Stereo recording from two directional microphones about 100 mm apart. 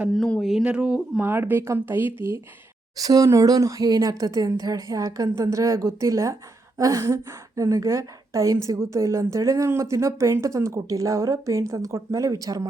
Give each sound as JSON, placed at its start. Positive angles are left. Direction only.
{"t": 0.1, "sound": "a sound", "side_deg": 5}
{"t": 0.6, "sound": "speech", "side_deg": -10}
{"t": 1.2, "sound": "speech", "side_deg": -20}
{"t": 3.0, "sound": "a woman's voice", "side_deg": -35}